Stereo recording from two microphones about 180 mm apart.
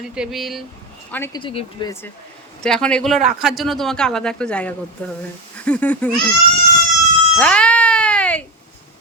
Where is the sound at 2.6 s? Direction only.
5° left (ahead or behind).